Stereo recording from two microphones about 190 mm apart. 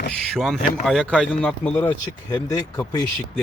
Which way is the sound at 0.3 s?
Centre (ahead or behind).